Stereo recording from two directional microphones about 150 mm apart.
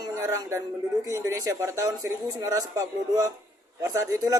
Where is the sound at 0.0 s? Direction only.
20° right (ahead or behind).